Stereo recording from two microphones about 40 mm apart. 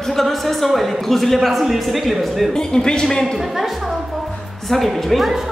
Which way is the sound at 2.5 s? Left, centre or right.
Centre.